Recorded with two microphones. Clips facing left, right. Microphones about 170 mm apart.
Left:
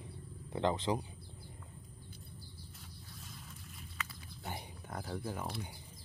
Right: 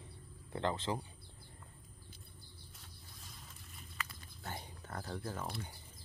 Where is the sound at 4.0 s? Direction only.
Centre (ahead or behind).